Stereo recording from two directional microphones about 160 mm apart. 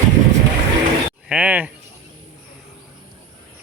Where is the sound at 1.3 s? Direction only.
5° right (ahead or behind).